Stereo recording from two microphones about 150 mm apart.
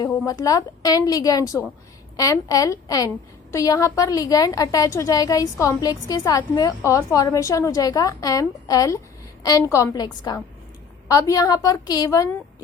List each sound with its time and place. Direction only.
0.0 s a woman's voice: 25° left (ahead or behind)